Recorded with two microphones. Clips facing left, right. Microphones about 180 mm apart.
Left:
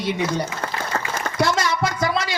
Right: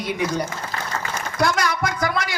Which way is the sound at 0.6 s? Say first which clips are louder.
Left 3 dB; 65° left (ahead or behind).